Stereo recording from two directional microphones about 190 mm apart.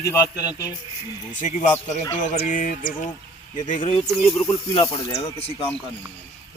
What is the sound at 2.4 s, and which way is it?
Music, 45° left (ahead or behind).